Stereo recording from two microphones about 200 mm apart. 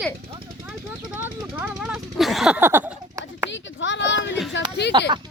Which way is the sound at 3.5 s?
65° left (ahead or behind).